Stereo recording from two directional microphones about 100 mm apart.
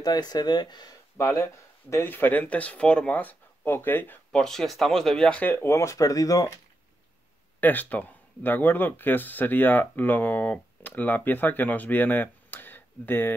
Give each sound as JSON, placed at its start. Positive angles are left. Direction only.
{"t": 0.0, "sound": "speech", "side_deg": 40}
{"t": 1.1, "sound": "speech", "side_deg": 30}
{"t": 4.3, "sound": "speech", "side_deg": 5}
{"t": 5.7, "sound": "speech", "side_deg": 30}
{"t": 7.6, "sound": "speech", "side_deg": 15}